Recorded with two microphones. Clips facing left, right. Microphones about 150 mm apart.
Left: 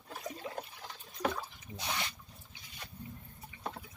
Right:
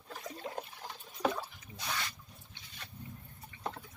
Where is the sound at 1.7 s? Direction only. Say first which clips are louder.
Left 1 dB; 20° left (ahead or behind).